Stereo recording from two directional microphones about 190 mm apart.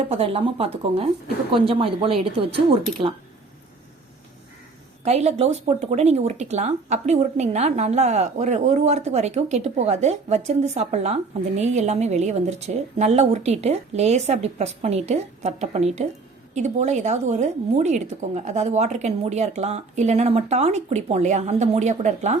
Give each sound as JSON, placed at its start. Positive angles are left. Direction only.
{"t": 0.0, "sound": "speech", "side_deg": -30}
{"t": 5.0, "sound": "speech", "side_deg": -35}